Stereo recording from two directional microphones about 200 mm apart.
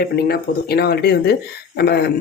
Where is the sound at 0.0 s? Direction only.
50° left (ahead or behind).